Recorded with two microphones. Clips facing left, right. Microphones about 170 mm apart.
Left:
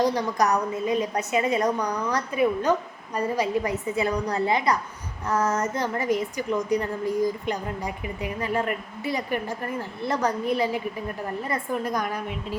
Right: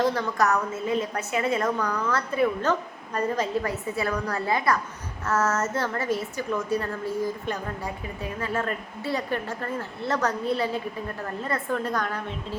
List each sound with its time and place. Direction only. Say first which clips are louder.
0.0 s a woman's voice: left 1 dB; 15° left (ahead or behind)